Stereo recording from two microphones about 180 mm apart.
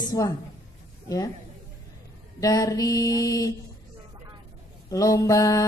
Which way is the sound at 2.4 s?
20° left (ahead or behind).